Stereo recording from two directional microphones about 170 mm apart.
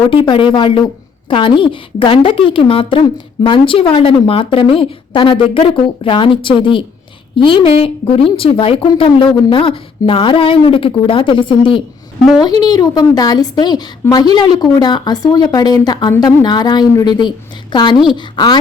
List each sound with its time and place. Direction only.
0.1 s a woman's voice: 30° left (ahead or behind)